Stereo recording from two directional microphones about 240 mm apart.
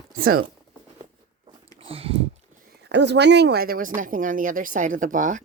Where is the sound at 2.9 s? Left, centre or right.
Right.